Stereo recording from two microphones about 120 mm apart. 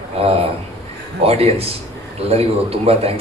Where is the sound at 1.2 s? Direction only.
55° right (ahead or behind).